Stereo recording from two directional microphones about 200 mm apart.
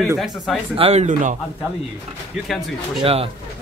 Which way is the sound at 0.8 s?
30° right (ahead or behind).